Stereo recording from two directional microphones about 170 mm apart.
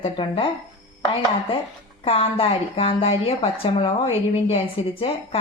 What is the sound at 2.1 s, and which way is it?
A woman's voice, 35° left (ahead or behind).